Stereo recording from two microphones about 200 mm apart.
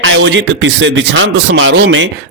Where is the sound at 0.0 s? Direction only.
70° right (ahead or behind).